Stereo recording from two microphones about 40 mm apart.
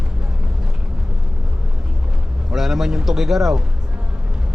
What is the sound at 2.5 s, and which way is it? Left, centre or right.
A man's voice, centre.